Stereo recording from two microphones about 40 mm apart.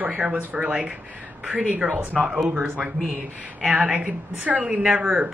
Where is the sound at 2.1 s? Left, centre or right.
Centre.